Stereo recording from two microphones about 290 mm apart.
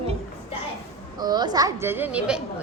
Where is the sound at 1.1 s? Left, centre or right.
Centre.